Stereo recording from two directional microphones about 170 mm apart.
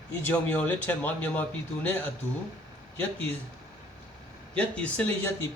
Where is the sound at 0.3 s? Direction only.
10° left (ahead or behind).